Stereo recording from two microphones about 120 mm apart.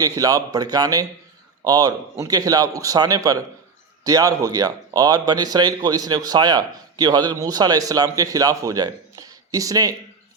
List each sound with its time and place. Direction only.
0.0 s speech: 30° right (ahead or behind)